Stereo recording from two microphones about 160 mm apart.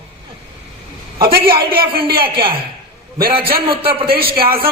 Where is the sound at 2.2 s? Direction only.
30° right (ahead or behind).